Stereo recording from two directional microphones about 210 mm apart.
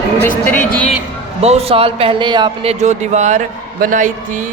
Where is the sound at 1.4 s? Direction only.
30° right (ahead or behind).